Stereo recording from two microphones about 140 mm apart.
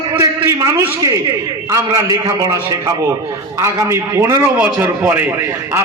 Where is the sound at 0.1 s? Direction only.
20° right (ahead or behind).